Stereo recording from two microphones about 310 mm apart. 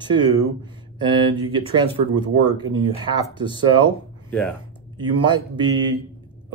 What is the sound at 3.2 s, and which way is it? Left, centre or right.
Speech, centre.